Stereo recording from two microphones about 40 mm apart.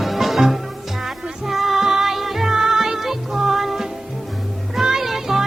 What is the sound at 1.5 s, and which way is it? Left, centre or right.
Music, centre.